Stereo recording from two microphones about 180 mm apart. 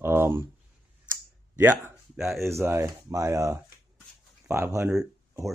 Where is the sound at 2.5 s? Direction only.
15° right (ahead or behind).